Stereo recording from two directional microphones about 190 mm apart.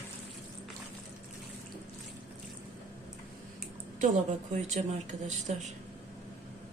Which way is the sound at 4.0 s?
40° right (ahead or behind).